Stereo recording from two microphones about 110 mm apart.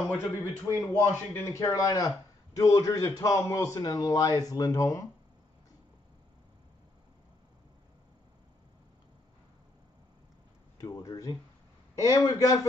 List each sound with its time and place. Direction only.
0.1 s a man's voice: 20° left (ahead or behind)
10.8 s speech: 35° left (ahead or behind)